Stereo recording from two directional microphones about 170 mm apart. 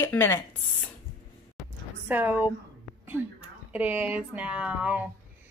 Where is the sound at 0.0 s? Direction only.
15° left (ahead or behind).